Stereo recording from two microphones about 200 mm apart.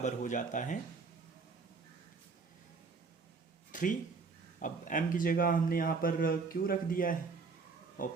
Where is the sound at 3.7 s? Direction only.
40° left (ahead or behind).